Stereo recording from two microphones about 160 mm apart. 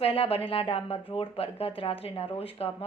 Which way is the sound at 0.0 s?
35° left (ahead or behind).